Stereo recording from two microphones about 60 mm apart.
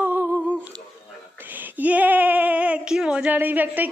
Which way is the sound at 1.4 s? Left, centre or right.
Right.